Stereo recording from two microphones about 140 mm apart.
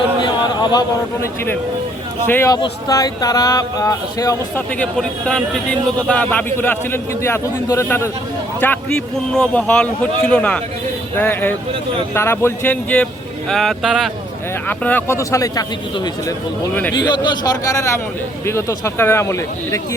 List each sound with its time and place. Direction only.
0.2 s a sound: 30° left (ahead or behind)
2.3 s speech: 20° left (ahead or behind)
4.5 s a man's voice: 10° left (ahead or behind)
14.7 s speech: 10° left (ahead or behind)
16.9 s speech: 30° left (ahead or behind)